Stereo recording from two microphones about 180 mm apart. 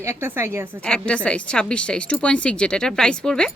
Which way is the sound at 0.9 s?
5° left (ahead or behind).